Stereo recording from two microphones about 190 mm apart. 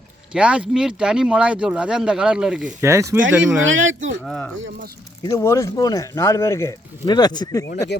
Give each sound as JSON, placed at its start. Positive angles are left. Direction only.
{"t": 0.3, "sound": "speech", "side_deg": -5}
{"t": 2.8, "sound": "speech", "side_deg": -15}
{"t": 3.6, "sound": "speech", "side_deg": -90}
{"t": 4.2, "sound": "speech", "side_deg": 5}